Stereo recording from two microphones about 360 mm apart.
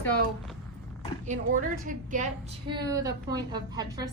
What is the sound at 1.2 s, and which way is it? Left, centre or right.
A woman's voice, right.